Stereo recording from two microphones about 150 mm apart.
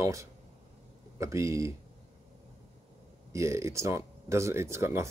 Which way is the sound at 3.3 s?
20° right (ahead or behind).